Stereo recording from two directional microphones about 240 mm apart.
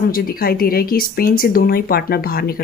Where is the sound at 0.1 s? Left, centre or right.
Left.